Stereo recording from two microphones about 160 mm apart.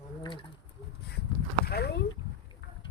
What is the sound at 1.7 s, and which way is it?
Speech, 85° left.